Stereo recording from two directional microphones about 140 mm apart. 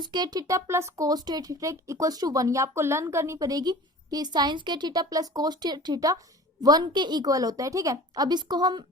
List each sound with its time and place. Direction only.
0.0 s speech: 30° right (ahead or behind)